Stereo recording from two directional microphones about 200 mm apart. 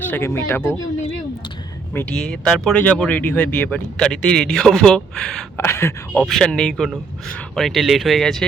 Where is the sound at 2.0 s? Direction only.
5° left (ahead or behind).